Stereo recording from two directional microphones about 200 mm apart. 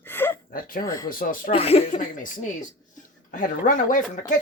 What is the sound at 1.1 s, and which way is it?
Speech, 45° left (ahead or behind).